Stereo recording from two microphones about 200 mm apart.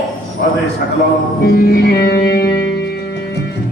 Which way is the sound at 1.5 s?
50° left (ahead or behind).